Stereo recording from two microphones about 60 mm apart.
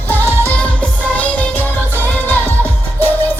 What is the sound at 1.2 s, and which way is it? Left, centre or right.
Music, left.